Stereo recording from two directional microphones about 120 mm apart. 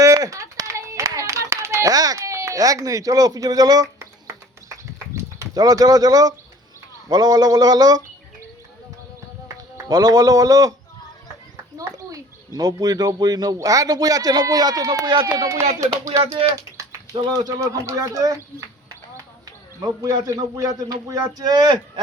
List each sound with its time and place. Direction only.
0.0 s clapping: 25° right (ahead or behind)
7.1 s speech: 35° right (ahead or behind)
9.7 s speech: 35° right (ahead or behind)
11.8 s speech: 30° right (ahead or behind)
15.4 s speech: 25° right (ahead or behind)
16.5 s a sound: 25° right (ahead or behind)
17.6 s speech: 25° right (ahead or behind)
20.1 s speech: 30° right (ahead or behind)